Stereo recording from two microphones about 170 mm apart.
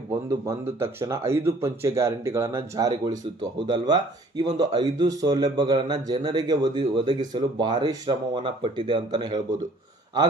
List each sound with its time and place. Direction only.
0.1 s speech: 15° right (ahead or behind)